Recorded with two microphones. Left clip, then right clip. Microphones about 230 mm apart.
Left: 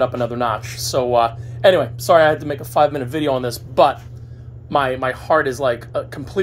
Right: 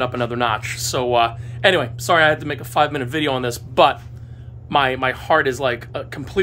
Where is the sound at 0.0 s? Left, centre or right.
Centre.